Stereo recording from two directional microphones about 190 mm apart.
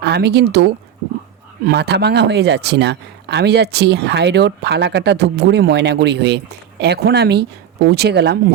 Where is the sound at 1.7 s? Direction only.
60° right (ahead or behind).